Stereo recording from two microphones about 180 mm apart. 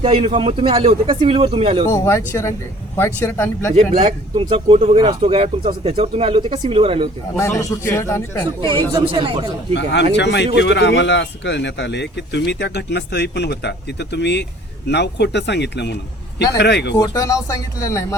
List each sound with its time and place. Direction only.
0.0 s speech: 30° right (ahead or behind)
1.9 s speech: 15° left (ahead or behind)
3.8 s speech: 35° right (ahead or behind)
7.3 s speech: 15° left (ahead or behind)
8.6 s speech: 30° right (ahead or behind)
9.7 s speech: 75° left (ahead or behind)
16.9 s speech: 20° left (ahead or behind)